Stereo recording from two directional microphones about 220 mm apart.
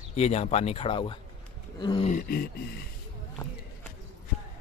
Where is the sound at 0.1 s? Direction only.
30° left (ahead or behind).